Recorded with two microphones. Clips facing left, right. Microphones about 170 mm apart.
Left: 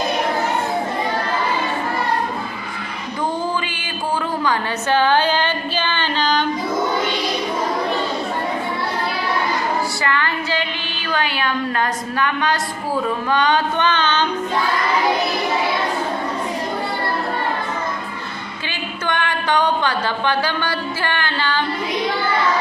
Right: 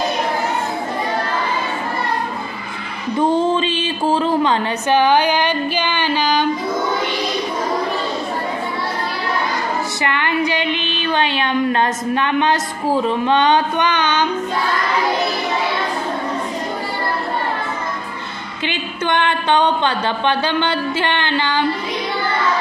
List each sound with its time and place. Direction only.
3.2 s a sound: 25° right (ahead or behind)
10.0 s a woman's voice: 20° right (ahead or behind)
18.7 s a woman's voice: 20° right (ahead or behind)